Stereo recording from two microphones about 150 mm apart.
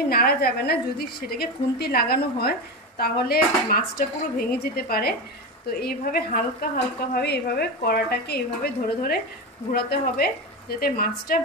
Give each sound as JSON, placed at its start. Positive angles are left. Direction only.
{"t": 0.1, "sound": "a woman's voice", "side_deg": 90}
{"t": 9.7, "sound": "a woman's voice", "side_deg": 80}
{"t": 10.8, "sound": "speech", "side_deg": 80}